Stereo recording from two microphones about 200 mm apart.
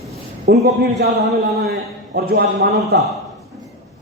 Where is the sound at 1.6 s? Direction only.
50° right (ahead or behind).